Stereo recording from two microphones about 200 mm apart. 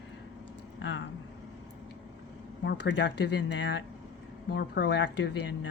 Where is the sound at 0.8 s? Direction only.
65° left (ahead or behind).